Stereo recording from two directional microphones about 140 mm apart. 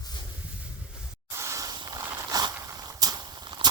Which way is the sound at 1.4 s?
20° right (ahead or behind).